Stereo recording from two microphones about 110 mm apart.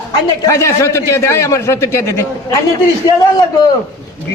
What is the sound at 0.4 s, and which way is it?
A man's voice, 30° left (ahead or behind).